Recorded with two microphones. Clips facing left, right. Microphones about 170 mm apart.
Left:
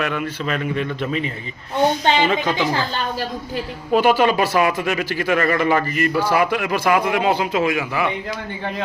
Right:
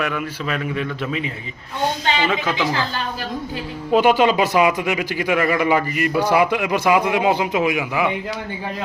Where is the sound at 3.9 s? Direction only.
20° right (ahead or behind).